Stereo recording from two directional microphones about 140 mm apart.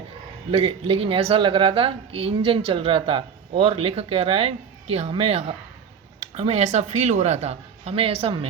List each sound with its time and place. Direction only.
0.5 s a woman's voice: 40° right (ahead or behind)